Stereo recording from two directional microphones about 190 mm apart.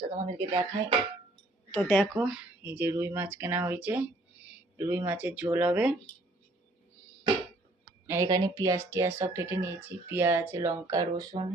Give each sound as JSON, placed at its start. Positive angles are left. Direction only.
{"t": 0.3, "sound": "speech", "side_deg": -20}
{"t": 1.7, "sound": "speech", "side_deg": 10}
{"t": 2.2, "sound": "speech", "side_deg": -5}
{"t": 8.0, "sound": "speech", "side_deg": -15}